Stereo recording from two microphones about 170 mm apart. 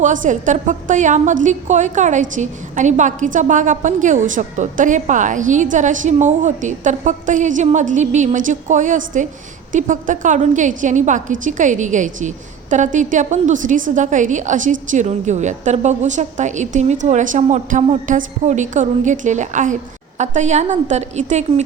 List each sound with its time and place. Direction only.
0.0 s a woman's voice: 50° right (ahead or behind)